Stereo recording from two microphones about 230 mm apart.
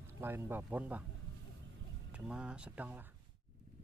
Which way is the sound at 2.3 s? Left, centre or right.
Centre.